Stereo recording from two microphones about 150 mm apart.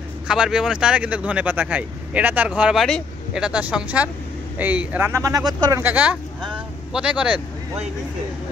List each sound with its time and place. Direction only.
0.3 s speech: 5° right (ahead or behind); by 5.8 s 25° right (ahead or behind)
5.8 s speech: 10° right (ahead or behind)